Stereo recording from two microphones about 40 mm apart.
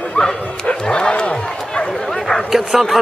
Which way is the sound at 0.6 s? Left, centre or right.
Left.